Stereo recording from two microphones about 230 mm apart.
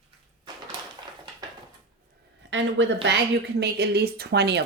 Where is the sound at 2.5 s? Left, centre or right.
Right.